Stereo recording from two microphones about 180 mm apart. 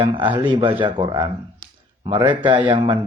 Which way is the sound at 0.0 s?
25° right (ahead or behind).